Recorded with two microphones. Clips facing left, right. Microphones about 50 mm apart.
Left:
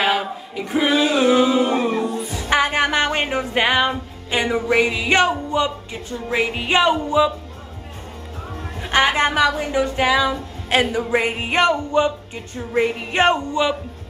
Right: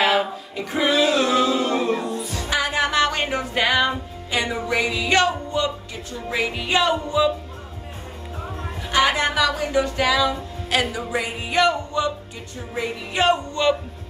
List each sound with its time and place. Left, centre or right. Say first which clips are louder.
0.1 s singing: right 1 dB; centre
2.5 s music: left 3 dB; left
4.3 s speech: left 4 dB; left
8.8 s speech: left 2 dB; left
13.5 s speech: even; centre